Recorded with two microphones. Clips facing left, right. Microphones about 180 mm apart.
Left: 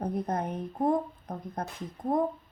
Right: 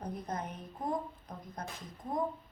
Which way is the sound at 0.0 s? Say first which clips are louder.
Left 8 dB; 55° left (ahead or behind).